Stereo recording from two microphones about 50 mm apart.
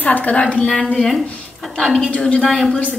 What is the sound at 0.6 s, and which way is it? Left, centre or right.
A woman's voice, centre.